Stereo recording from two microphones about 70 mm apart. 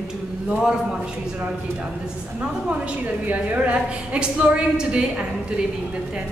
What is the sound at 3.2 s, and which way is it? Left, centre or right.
A woman's voice, centre.